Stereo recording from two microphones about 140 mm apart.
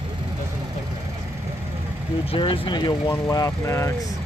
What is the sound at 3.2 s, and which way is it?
Speech, 20° left (ahead or behind).